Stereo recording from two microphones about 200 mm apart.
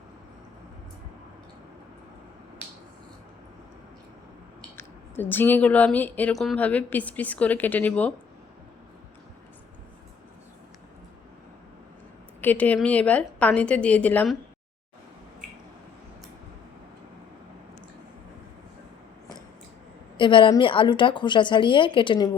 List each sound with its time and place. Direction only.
4.8 s speech: 10° left (ahead or behind)
12.4 s speech: 10° left (ahead or behind)
20.1 s a woman's voice: 25° left (ahead or behind)